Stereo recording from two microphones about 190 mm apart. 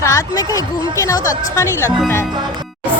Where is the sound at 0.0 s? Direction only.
15° left (ahead or behind).